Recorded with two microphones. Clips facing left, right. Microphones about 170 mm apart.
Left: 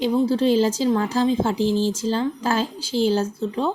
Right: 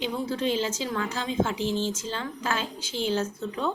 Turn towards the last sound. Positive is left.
turn(degrees=30)  # may be behind; listen again after turning